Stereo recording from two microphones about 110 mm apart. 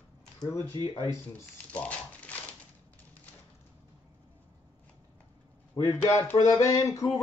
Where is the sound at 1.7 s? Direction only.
10° left (ahead or behind).